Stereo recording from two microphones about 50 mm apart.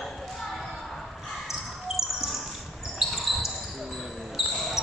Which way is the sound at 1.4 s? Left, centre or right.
Centre.